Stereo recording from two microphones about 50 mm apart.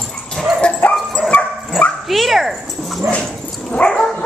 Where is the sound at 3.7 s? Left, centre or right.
Left.